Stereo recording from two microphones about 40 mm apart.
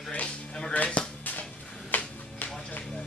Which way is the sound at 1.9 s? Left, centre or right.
Left.